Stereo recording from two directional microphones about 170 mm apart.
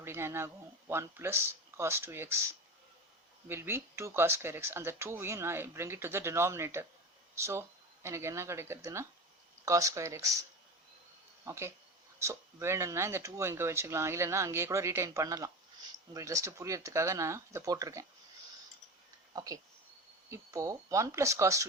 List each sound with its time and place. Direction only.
0.0 s speech: 15° right (ahead or behind)
3.5 s speech: 15° right (ahead or behind)
11.4 s speech: 15° right (ahead or behind)
19.3 s speech: 20° right (ahead or behind)